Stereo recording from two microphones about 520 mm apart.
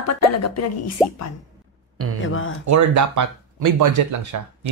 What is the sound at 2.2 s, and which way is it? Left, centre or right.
Speech, left.